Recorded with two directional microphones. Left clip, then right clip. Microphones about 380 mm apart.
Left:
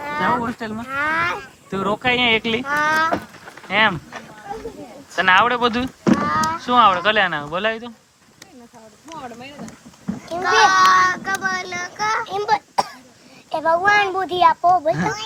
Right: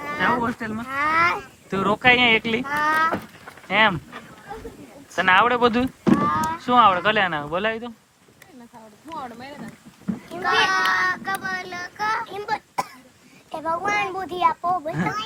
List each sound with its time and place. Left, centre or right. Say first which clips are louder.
0.0 s speech: left 2 dB; centre
0.9 s a child's voice: right 1 dB; left
1.7 s speech: right 2 dB; centre
2.6 s a sound: left 3 dB; left
3.7 s speech: left 1 dB; centre
5.1 s speech: left 2 dB; centre
6.2 s rowboat: left 3 dB; left
6.6 s speech: left 1 dB; centre
10.4 s a child's voice: left 6 dB; left